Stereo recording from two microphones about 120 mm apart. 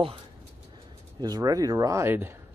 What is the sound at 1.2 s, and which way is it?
Speech, 35° right (ahead or behind).